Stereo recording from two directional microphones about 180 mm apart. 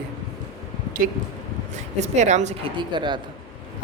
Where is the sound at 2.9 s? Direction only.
25° right (ahead or behind).